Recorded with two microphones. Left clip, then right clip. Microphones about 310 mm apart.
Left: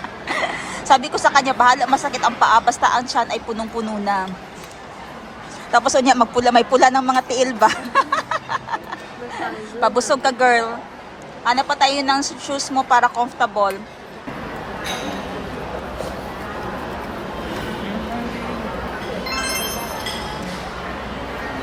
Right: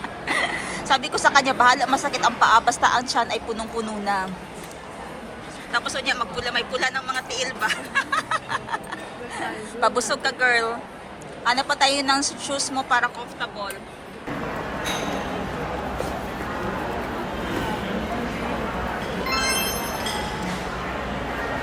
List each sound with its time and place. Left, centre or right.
0.3 s a sound: centre
1.6 s speech: centre
5.7 s speech: left
8.1 s vehicle: centre
9.3 s speech: centre